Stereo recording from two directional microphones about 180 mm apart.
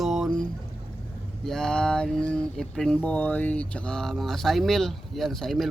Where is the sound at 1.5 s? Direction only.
5° left (ahead or behind).